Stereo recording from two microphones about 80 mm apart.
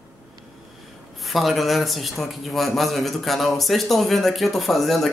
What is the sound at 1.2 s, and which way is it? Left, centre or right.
A man's voice, centre.